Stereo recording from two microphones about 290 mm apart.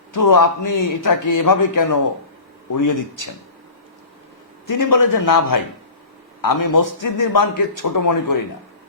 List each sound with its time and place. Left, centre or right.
0.1 s a man's voice: left
4.6 s a man's voice: left